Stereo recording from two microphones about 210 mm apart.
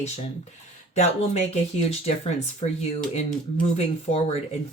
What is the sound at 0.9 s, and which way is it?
Speech, 30° left (ahead or behind).